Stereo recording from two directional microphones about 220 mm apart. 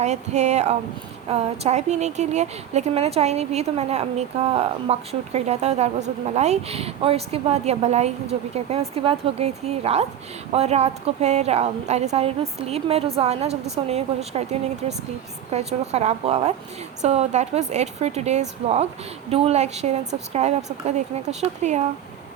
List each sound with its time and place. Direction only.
0.0 s a woman's voice: 30° right (ahead or behind)
15.5 s a woman's voice: 30° right (ahead or behind)